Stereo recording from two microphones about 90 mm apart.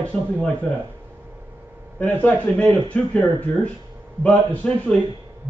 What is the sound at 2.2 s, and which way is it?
Speech, 15° left (ahead or behind).